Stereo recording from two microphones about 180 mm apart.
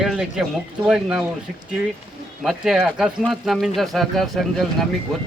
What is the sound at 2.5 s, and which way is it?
A man's voice, 5° right (ahead or behind).